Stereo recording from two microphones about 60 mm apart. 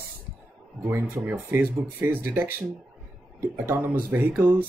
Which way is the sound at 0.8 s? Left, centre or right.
Right.